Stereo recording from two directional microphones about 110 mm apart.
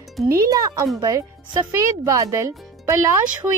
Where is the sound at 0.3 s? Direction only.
30° right (ahead or behind).